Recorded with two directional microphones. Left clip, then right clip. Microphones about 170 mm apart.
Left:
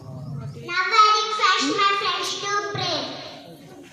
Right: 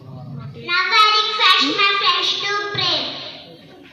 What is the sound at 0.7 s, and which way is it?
Child singing, 40° right (ahead or behind).